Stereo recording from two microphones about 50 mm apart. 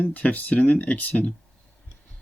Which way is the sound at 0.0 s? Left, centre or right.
Left.